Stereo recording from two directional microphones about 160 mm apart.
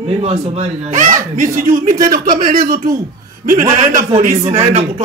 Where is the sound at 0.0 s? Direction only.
40° right (ahead or behind).